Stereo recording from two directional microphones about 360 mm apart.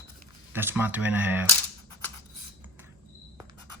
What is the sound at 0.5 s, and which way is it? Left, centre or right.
Speech, centre.